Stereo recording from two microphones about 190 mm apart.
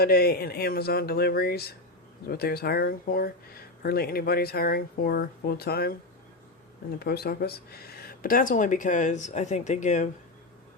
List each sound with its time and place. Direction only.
0.0 s speech: 55° left (ahead or behind)
7.0 s speech: 55° left (ahead or behind); by 10.1 s 40° left (ahead or behind)